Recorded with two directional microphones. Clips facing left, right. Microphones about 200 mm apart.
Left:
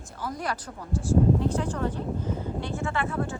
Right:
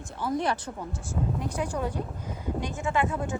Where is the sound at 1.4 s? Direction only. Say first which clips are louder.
Left 3 dB; 15° right (ahead or behind).